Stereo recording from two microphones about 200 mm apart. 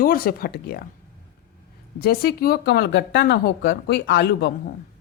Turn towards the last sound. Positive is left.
turn(degrees=55)  # may be behind; listen again after turning